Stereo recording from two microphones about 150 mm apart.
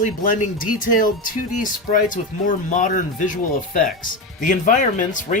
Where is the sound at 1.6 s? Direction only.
60° left (ahead or behind).